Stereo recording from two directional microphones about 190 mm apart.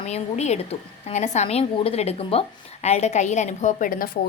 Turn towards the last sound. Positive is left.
turn(degrees=50)  # may be behind; listen again after turning